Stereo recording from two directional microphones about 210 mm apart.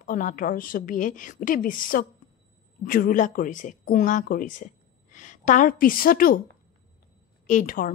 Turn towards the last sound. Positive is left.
turn(degrees=40)  # may be behind; listen again after turning